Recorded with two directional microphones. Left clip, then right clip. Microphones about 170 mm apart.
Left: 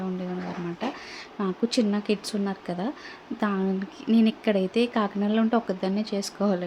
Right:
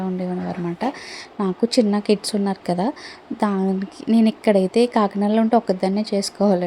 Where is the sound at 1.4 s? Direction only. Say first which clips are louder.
Right 7 dB; 25° right (ahead or behind).